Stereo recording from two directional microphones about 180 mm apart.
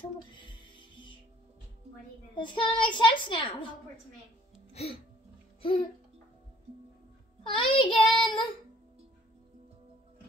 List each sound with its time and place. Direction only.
0.5 s music: 25° left (ahead or behind)
2.3 s child singing: 25° left (ahead or behind)
4.7 s speech: 35° left (ahead or behind)
7.5 s child singing: 25° left (ahead or behind)